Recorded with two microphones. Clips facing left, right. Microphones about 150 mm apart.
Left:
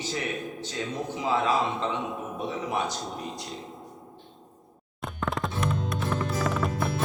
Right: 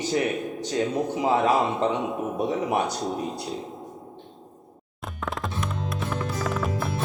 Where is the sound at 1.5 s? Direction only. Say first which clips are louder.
Right 4 dB; 45° right (ahead or behind).